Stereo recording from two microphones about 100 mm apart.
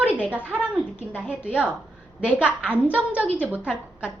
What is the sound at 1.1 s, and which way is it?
A woman's voice, 10° right (ahead or behind).